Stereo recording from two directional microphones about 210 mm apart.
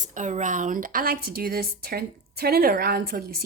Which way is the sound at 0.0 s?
35° right (ahead or behind).